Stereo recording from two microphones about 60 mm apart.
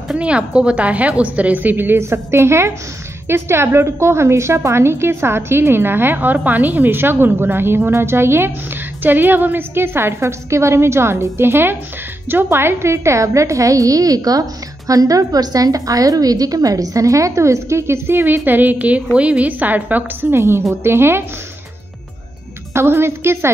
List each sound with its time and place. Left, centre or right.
0.2 s a woman's voice: centre; by 2.0 s right
2.0 s a woman's voice: right
20.2 s a woman's voice: right
22.8 s a woman's voice: right